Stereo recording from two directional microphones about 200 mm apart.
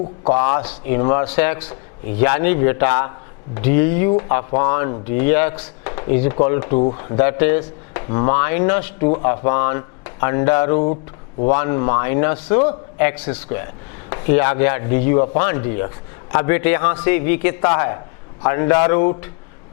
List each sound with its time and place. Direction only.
0.3 s speech: 15° left (ahead or behind)